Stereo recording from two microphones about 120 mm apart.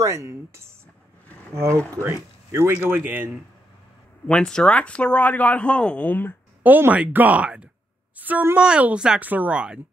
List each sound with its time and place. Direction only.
0.0 s speech: 25° right (ahead or behind)
4.3 s speech: 5° left (ahead or behind)
6.6 s speech: 15° right (ahead or behind)